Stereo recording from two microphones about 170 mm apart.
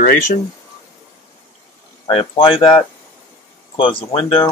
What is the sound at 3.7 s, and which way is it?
Speech, 30° left (ahead or behind).